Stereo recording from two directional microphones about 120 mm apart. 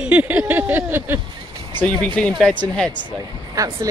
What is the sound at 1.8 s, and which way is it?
Speech, 10° left (ahead or behind).